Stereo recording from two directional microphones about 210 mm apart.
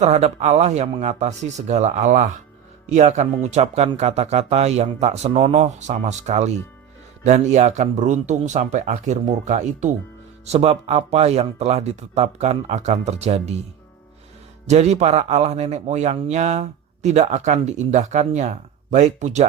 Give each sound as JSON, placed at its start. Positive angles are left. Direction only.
{"t": 0.0, "sound": "a man's voice", "side_deg": -30}
{"t": 14.7, "sound": "a man's voice", "side_deg": -30}